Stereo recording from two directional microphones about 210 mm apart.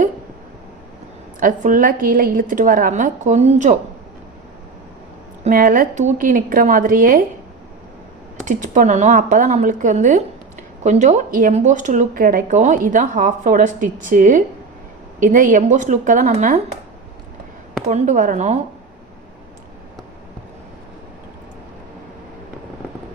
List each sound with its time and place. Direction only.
1.4 s speech: 40° right (ahead or behind)
5.4 s speech: 40° right (ahead or behind)
8.4 s speech: 35° right (ahead or behind)
17.8 s speech: 35° right (ahead or behind)